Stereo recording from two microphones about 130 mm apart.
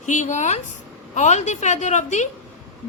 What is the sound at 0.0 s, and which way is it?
A woman's voice, 70° left (ahead or behind).